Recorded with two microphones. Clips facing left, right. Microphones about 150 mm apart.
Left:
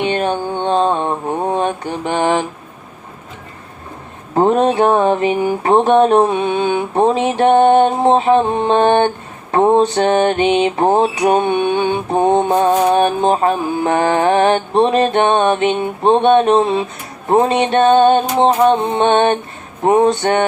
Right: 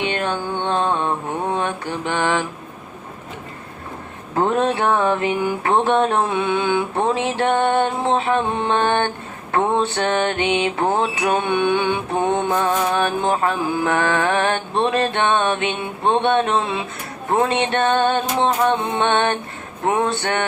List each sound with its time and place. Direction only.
0.0 s music: 20° left (ahead or behind)
0.6 s mantra: 20° left (ahead or behind)
4.4 s music: 20° left (ahead or behind)
11.3 s mantra: 50° left (ahead or behind)
12.2 s speech: 15° left (ahead or behind)
12.6 s mantra: 45° left (ahead or behind)
12.9 s music: 20° left (ahead or behind)
16.0 s speech: 20° left (ahead or behind)
17.4 s music: 20° left (ahead or behind)
20.1 s speech: 15° left (ahead or behind)